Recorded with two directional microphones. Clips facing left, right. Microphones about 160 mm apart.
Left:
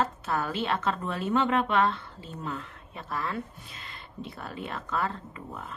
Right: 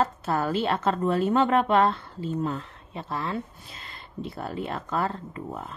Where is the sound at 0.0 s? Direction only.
35° right (ahead or behind).